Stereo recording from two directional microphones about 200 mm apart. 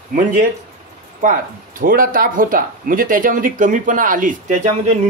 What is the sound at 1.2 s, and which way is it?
Speech, 45° right (ahead or behind).